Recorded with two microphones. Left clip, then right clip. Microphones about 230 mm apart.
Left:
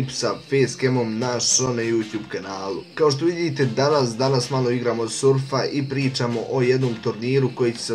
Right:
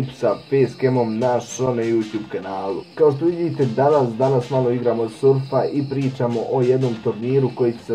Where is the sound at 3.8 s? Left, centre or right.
Left.